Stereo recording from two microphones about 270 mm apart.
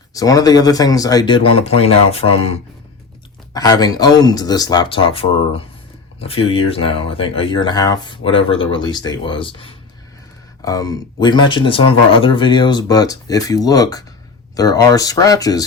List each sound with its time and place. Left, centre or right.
0.1 s speech: centre
3.5 s speech: centre